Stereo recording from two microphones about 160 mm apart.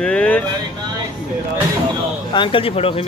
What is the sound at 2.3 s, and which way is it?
Speech, 30° left (ahead or behind).